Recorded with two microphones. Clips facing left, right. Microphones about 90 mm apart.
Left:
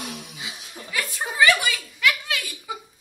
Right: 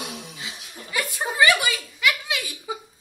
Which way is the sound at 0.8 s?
15° right (ahead or behind).